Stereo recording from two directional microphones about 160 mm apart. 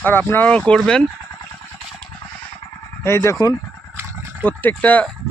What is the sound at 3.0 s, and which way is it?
Speech, 15° left (ahead or behind).